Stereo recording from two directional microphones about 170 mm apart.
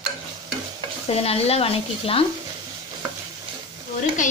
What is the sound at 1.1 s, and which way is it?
Speech, 35° left (ahead or behind).